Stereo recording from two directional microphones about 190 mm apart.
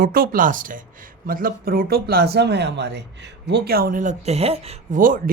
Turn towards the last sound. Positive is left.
turn(degrees=-45)  # may be behind; listen again after turning